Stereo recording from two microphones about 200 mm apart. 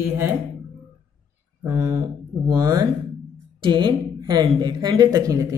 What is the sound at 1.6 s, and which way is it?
A woman's voice, 15° right (ahead or behind).